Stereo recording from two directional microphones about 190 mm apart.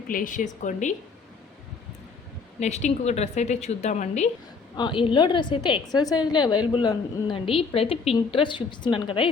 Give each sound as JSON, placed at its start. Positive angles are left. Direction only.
{"t": 0.1, "sound": "a woman's voice", "side_deg": 45}
{"t": 2.6, "sound": "a woman's voice", "side_deg": 35}
{"t": 4.8, "sound": "a woman's voice", "side_deg": 25}